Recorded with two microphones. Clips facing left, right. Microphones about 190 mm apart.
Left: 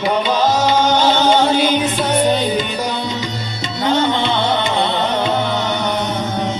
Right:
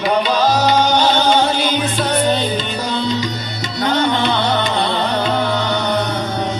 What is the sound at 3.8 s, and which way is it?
Music, 25° left (ahead or behind).